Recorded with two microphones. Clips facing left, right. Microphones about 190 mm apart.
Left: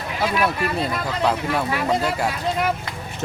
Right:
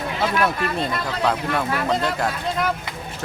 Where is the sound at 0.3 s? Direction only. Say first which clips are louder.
Left 1 dB; 5° left (ahead or behind).